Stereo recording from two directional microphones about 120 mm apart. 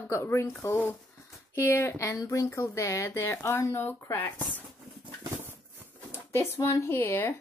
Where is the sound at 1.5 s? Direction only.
20° left (ahead or behind).